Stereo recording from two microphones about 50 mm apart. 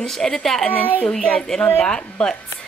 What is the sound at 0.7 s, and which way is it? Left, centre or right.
Speech, left.